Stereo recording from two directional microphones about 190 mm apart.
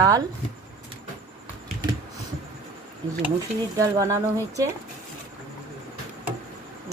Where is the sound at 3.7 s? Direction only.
15° right (ahead or behind).